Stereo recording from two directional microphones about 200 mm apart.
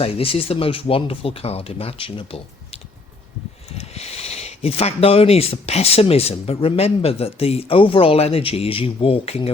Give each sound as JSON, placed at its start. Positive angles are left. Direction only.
{"t": 0.0, "sound": "speech", "side_deg": 25}
{"t": 3.8, "sound": "speech", "side_deg": 30}